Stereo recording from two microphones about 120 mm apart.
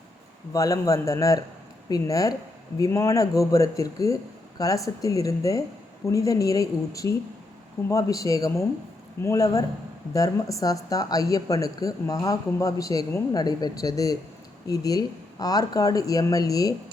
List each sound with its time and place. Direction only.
0.5 s speech: 30° left (ahead or behind)